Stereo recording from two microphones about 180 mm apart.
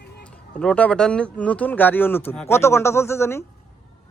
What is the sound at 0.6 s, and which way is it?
Speech, 5° left (ahead or behind).